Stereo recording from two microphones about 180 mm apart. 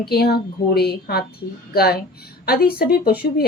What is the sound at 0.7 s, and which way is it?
A woman's voice, 60° left (ahead or behind).